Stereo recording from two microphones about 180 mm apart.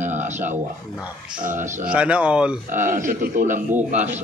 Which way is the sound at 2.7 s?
45° right (ahead or behind).